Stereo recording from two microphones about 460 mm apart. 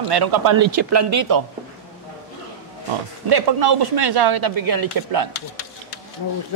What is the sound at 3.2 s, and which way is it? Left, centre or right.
Speech, right.